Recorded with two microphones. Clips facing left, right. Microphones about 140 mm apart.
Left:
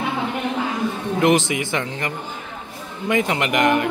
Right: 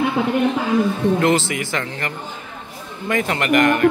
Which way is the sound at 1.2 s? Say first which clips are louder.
Left 1 dB; 20° left (ahead or behind).